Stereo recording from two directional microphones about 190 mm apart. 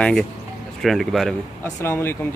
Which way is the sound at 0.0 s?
5° left (ahead or behind).